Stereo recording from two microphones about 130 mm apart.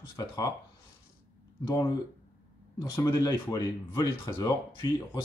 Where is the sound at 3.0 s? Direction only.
30° left (ahead or behind).